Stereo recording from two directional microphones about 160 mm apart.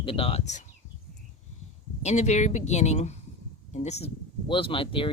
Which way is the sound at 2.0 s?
45° left (ahead or behind).